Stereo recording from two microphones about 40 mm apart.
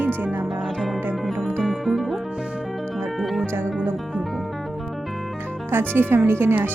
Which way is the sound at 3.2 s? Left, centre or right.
Centre.